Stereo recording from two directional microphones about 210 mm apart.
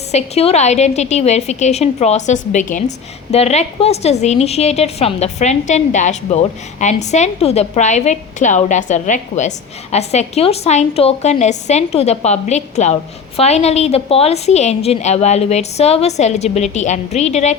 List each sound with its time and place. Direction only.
0.1 s a woman's voice: 30° left (ahead or behind)